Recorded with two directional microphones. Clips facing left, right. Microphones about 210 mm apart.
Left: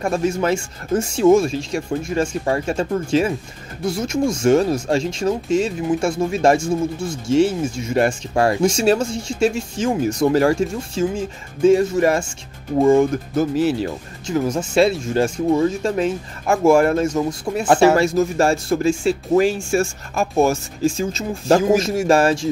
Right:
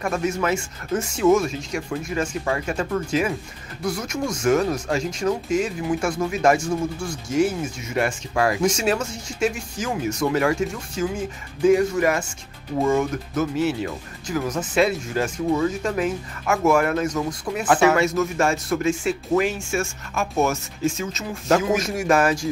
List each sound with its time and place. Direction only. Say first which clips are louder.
0.0 s speech: left 4 dB; 30° left (ahead or behind)